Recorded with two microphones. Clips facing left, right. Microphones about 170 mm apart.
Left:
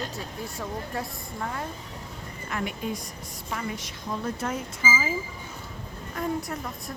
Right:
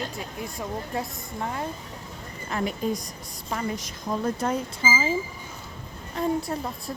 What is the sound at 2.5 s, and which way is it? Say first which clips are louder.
A woman's voice: right 4 dB; 35° right (ahead or behind).